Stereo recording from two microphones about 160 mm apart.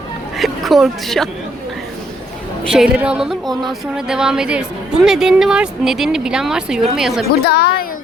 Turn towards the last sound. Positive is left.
turn(degrees=85)